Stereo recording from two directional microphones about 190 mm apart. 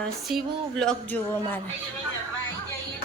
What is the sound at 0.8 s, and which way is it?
Speech, 5° left (ahead or behind).